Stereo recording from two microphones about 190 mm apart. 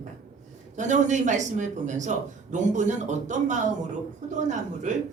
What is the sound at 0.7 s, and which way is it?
A man's voice, 40° right (ahead or behind).